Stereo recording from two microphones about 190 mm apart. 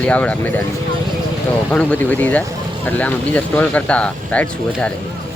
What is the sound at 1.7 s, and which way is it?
Speech, 5° left (ahead or behind).